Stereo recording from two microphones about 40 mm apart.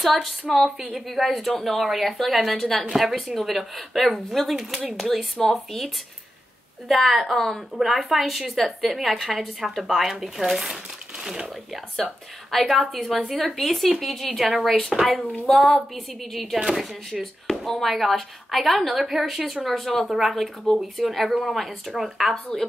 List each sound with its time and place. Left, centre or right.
0.5 s a woman's voice: centre
4.6 s speech: centre
4.9 s a woman's voice: centre
6.9 s a woman's voice: centre
7.8 s a woman's voice: centre
15.5 s a woman's voice: centre
20.2 s a woman's voice: centre
22.5 s a woman's voice: centre